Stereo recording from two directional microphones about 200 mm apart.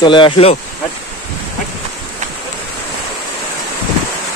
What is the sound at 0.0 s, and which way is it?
Speech, 25° left (ahead or behind).